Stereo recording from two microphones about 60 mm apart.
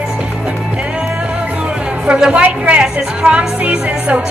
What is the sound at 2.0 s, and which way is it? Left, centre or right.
A woman's voice, centre.